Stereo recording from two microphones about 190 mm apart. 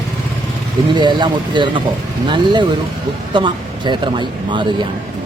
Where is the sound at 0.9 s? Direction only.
25° right (ahead or behind).